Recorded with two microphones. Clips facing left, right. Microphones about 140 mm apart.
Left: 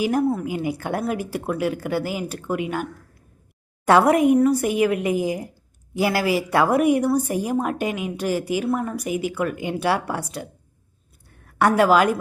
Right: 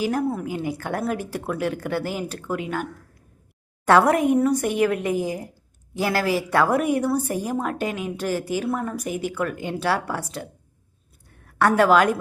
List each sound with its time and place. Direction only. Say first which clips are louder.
0.0 s a woman's voice: left 3 dB; 15° left (ahead or behind)
3.8 s a woman's voice: left 2 dB; 10° left (ahead or behind)
11.6 s a woman's voice: even; 10° left (ahead or behind)